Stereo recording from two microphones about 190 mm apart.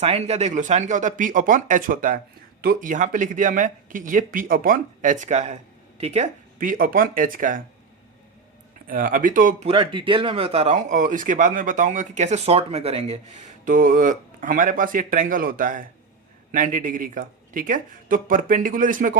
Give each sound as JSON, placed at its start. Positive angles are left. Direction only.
{"t": 0.0, "sound": "speech", "side_deg": -35}
{"t": 8.9, "sound": "speech", "side_deg": -45}
{"t": 9.6, "sound": "speech", "side_deg": -30}
{"t": 13.7, "sound": "speech", "side_deg": -45}